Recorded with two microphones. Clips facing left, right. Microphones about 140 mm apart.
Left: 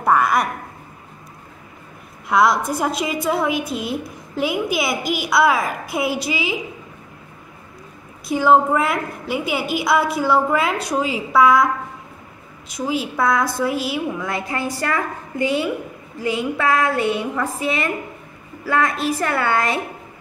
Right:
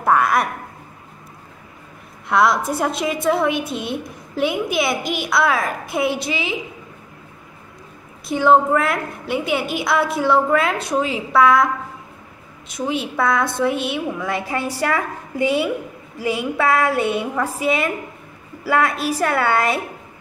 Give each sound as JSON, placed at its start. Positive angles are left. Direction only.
{"t": 0.0, "sound": "speech", "side_deg": 0}
{"t": 2.2, "sound": "a woman's voice", "side_deg": 0}
{"t": 8.3, "sound": "a woman's voice", "side_deg": 0}